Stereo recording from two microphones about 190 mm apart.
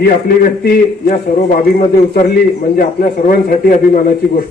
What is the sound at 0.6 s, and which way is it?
A man's voice, 40° left (ahead or behind).